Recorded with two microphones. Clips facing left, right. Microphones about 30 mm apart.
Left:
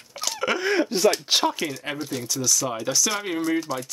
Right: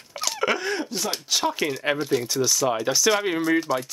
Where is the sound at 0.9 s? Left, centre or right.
Left.